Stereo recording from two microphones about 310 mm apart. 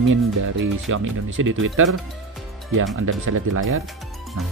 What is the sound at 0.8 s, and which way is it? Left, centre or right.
Speech, right.